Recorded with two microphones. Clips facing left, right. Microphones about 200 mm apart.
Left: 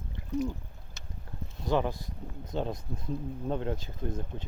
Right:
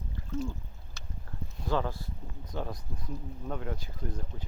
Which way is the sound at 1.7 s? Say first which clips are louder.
Left 3 dB; 15° left (ahead or behind).